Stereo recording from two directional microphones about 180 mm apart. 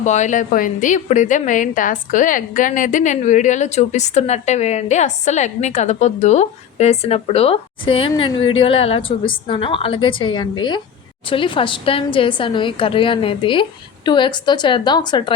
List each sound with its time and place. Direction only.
0.0 s a woman's voice: 40° left (ahead or behind); by 15.3 s 25° left (ahead or behind)